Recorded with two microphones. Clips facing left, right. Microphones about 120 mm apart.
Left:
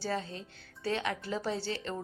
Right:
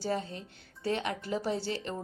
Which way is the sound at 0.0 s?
20° right (ahead or behind).